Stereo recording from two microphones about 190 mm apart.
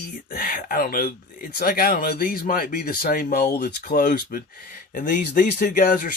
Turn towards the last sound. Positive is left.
turn(degrees=45)  # may be behind; listen again after turning